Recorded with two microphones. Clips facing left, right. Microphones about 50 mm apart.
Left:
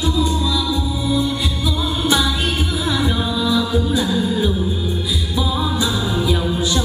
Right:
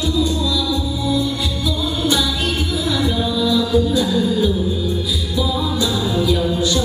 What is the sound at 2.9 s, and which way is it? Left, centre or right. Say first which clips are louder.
Music: right 1 dB; left.